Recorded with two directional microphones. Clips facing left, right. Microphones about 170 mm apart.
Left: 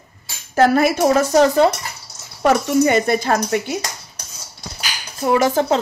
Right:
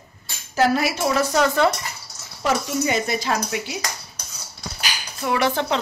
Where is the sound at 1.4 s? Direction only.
30° left (ahead or behind).